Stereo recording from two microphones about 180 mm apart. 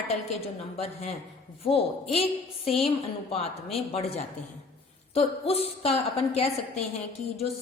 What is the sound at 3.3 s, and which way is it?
A woman's voice, 35° left (ahead or behind).